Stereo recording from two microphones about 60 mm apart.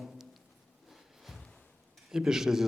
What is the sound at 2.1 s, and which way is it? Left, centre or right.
Speech, centre.